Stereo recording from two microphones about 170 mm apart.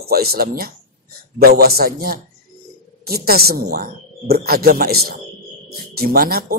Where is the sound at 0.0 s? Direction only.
65° right (ahead or behind).